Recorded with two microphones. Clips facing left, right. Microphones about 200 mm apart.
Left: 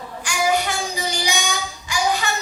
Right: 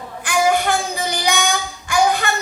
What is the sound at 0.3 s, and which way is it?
Child singing, 55° right (ahead or behind).